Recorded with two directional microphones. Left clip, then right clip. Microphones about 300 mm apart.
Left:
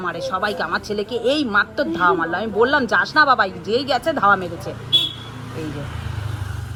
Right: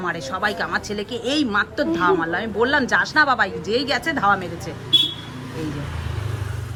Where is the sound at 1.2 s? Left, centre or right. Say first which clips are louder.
Left 3 dB; centre.